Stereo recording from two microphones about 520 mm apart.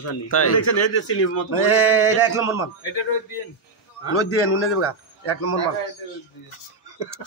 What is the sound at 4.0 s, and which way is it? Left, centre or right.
A man's voice, left.